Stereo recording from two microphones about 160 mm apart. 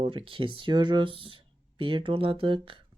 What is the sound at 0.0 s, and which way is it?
Speech, 35° right (ahead or behind).